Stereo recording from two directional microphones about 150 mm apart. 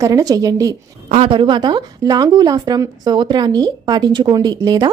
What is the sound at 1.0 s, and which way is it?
Speech, 40° right (ahead or behind).